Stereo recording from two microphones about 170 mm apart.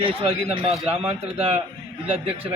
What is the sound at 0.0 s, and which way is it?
A man's voice, 35° right (ahead or behind).